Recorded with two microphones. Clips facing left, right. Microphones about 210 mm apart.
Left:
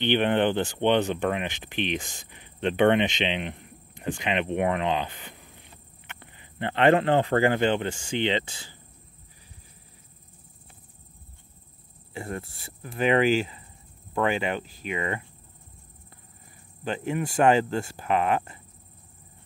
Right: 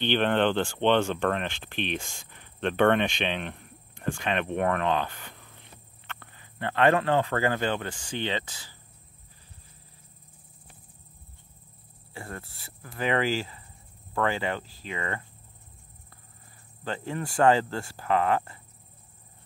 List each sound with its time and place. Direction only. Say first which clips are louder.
0.0 s speech: left 1 dB; 15° left (ahead or behind)
12.1 s speech: left 6 dB; 20° left (ahead or behind)
16.8 s speech: left 4 dB; 15° left (ahead or behind)